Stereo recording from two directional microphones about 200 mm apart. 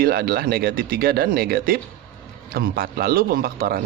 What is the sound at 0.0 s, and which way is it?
Speech, 50° right (ahead or behind).